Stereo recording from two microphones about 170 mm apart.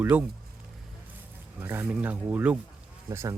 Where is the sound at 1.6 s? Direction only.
10° right (ahead or behind).